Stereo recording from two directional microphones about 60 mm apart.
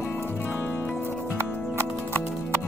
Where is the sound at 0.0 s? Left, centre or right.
Left.